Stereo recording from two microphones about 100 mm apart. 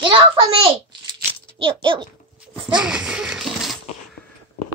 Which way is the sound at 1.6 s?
60° right (ahead or behind).